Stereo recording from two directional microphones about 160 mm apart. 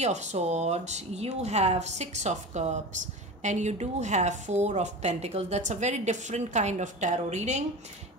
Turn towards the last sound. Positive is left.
turn(degrees=-45)  # may be behind; listen again after turning